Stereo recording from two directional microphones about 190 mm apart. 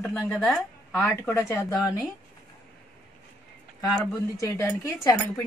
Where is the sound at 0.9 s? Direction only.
15° left (ahead or behind).